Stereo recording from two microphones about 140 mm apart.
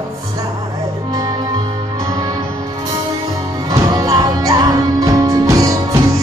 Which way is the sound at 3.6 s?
25° right (ahead or behind).